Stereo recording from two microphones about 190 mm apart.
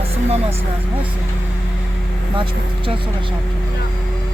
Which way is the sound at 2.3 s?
25° right (ahead or behind).